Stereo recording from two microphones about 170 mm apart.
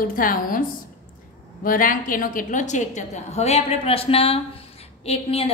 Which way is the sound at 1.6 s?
55° left (ahead or behind).